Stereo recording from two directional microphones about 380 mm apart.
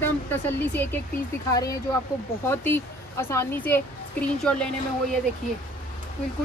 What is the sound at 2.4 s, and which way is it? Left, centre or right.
Speech, centre.